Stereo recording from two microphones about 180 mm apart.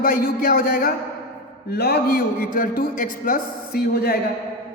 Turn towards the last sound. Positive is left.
turn(degrees=60)  # may be behind; listen again after turning